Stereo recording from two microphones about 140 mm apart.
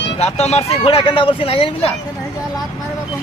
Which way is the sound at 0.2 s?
50° left (ahead or behind).